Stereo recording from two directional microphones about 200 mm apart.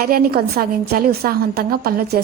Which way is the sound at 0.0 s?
50° right (ahead or behind).